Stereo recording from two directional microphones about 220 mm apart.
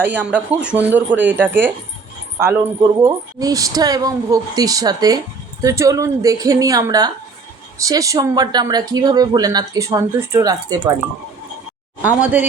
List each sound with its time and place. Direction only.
0.0 s speech: 10° right (ahead or behind)
3.0 s speech: 15° right (ahead or behind)
12.0 s speech: 5° right (ahead or behind)